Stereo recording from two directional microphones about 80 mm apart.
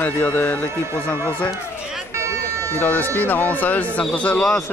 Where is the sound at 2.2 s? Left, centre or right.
Right.